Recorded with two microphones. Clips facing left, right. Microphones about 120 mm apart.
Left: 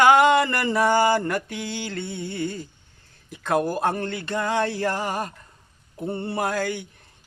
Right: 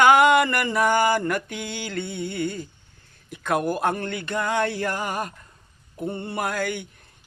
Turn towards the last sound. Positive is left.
turn(degrees=30)  # may be behind; listen again after turning